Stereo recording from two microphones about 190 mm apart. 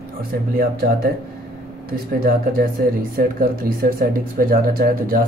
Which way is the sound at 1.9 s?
50° right (ahead or behind).